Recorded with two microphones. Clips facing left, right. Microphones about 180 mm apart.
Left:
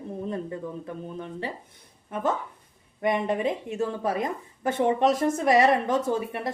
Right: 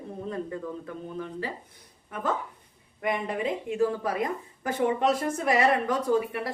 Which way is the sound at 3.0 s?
25° left (ahead or behind).